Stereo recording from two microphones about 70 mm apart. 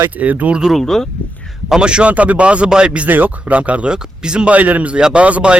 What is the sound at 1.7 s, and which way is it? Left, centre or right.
Speech, centre.